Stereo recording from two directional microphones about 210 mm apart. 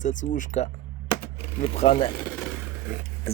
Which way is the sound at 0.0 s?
35° left (ahead or behind).